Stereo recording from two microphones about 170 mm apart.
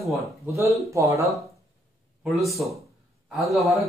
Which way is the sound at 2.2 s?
Centre (ahead or behind).